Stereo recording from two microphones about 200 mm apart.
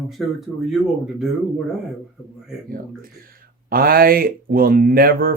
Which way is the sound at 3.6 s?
45° right (ahead or behind).